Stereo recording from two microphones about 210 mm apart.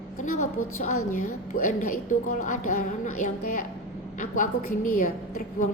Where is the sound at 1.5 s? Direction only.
40° left (ahead or behind).